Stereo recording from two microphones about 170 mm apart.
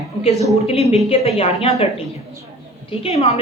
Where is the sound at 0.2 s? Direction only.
35° left (ahead or behind).